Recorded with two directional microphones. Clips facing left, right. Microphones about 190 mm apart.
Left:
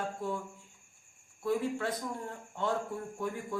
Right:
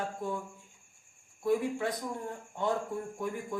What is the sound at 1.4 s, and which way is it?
Speech, 15° right (ahead or behind).